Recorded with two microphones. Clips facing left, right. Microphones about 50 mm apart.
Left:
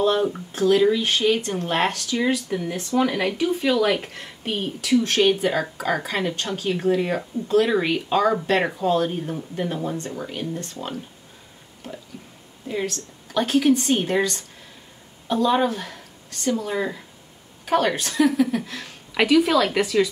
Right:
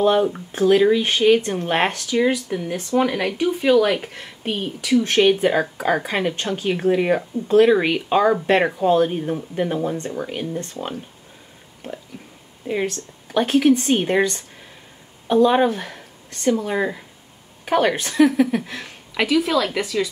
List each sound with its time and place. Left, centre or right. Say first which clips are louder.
0.5 s speech: right 2 dB; right
12.1 s a sound: right 2 dB; right
12.7 s speech: right 3 dB; right
19.1 s a woman's voice: left 1 dB; centre